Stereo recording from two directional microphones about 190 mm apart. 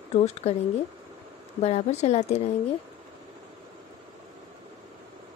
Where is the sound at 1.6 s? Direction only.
35° left (ahead or behind).